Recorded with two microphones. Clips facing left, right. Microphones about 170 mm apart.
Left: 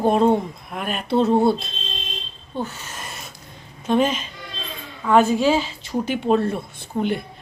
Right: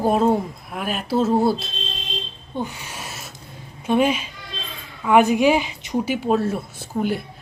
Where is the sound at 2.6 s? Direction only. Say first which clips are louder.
Right 1 dB; 10° right (ahead or behind).